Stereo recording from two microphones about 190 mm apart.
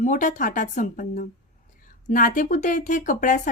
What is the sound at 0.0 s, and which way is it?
A woman's voice, 40° left (ahead or behind).